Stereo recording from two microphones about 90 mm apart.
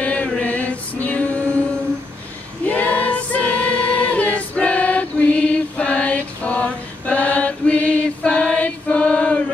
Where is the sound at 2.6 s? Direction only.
15° left (ahead or behind).